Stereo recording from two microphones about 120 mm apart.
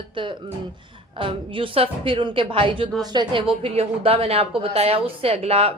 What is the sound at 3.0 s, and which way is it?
A woman's voice, 35° right (ahead or behind).